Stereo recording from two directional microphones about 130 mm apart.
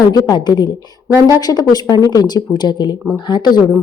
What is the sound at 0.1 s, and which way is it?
Speech, 30° left (ahead or behind).